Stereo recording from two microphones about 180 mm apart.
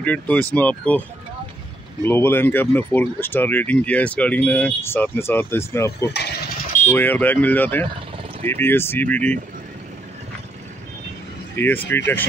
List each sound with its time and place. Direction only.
0.0 s speech: 10° left (ahead or behind)
2.0 s speech: 10° left (ahead or behind)
6.1 s speech: 65° left (ahead or behind)
6.9 s speech: 10° left (ahead or behind)
11.5 s speech: 10° left (ahead or behind)